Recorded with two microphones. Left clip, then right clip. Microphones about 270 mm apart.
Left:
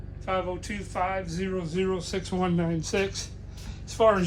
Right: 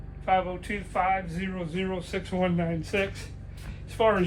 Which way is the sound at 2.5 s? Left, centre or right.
Centre.